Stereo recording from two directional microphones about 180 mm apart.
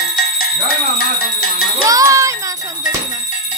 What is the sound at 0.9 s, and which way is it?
Bell, 55° left (ahead or behind).